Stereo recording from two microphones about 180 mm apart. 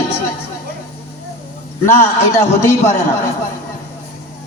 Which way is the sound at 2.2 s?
15° left (ahead or behind).